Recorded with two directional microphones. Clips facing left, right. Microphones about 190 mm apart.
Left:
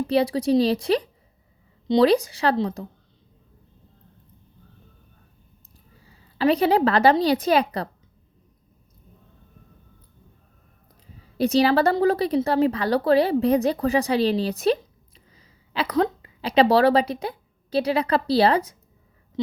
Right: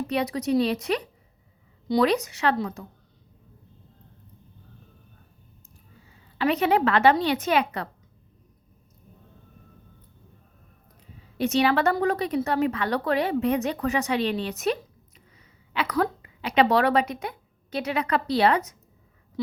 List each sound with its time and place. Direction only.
0.1 s a woman's voice: 30° left (ahead or behind)
6.4 s a woman's voice: 35° left (ahead or behind)
11.3 s a woman's voice: 35° left (ahead or behind)